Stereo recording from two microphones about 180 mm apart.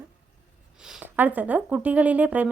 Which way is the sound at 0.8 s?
5° right (ahead or behind).